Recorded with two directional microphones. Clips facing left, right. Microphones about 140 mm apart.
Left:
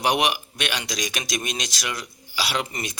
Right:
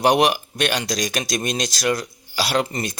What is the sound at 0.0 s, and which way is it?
Speech, 40° right (ahead or behind).